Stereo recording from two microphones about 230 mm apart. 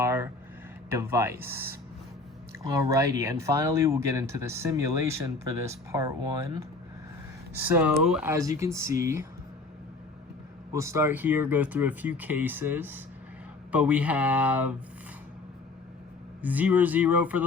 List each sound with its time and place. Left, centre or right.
0.0 s a sound: centre
0.9 s speech: centre
10.7 s a man's voice: centre
16.4 s speech: centre